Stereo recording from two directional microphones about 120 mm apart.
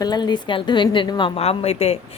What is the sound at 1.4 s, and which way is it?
Speech, 55° left (ahead or behind).